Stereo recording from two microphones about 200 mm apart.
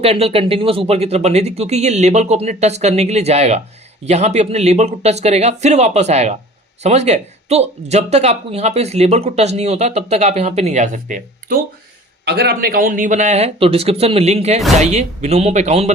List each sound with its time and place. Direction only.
0.0 s speech: 30° right (ahead or behind)
12.2 s speech: 55° right (ahead or behind); by 15.9 s 35° right (ahead or behind)